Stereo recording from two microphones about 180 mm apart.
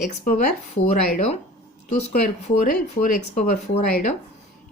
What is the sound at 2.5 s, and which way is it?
Speech, 50° left (ahead or behind).